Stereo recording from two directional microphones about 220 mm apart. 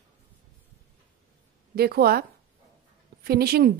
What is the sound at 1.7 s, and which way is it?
Speech, 45° right (ahead or behind).